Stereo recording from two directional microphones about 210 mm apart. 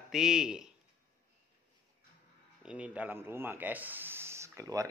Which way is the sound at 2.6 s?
5° right (ahead or behind).